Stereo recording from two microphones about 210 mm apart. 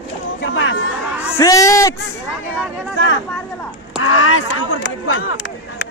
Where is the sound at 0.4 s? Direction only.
60° left (ahead or behind).